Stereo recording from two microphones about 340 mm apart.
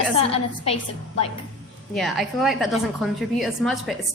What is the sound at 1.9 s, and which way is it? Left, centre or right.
A woman's voice, centre.